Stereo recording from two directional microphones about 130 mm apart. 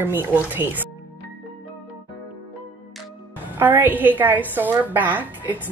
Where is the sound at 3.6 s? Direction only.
15° right (ahead or behind).